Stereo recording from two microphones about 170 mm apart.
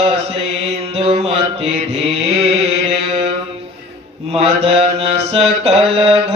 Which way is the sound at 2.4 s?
35° right (ahead or behind).